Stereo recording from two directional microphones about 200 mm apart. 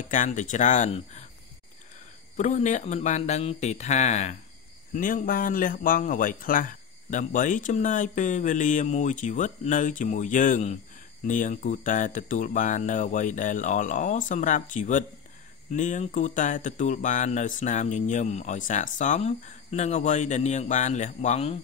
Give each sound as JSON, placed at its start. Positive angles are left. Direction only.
{"t": 0.1, "sound": "speech", "side_deg": 40}
{"t": 2.3, "sound": "speech", "side_deg": 35}